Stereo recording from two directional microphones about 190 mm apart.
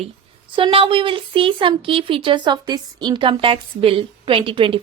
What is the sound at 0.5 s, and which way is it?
A woman's voice, 30° right (ahead or behind).